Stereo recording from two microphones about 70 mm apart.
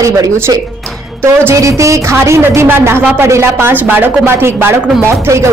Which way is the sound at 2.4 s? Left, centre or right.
Right.